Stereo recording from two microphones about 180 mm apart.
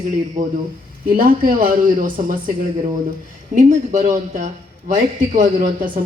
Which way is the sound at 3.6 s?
40° right (ahead or behind).